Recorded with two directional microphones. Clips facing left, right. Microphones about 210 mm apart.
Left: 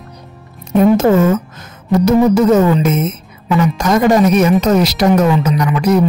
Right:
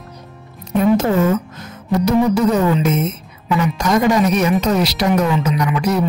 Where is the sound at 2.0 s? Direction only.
45° left (ahead or behind).